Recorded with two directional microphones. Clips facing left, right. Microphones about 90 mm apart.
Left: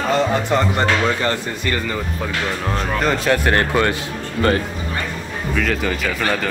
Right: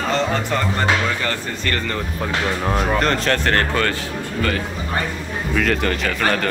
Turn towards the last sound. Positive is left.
turn(degrees=5)  # may be behind; listen again after turning